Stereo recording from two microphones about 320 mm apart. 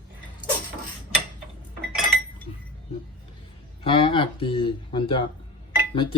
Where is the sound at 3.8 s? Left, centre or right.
Centre.